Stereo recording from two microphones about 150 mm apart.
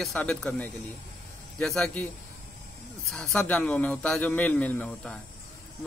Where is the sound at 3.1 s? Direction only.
5° left (ahead or behind).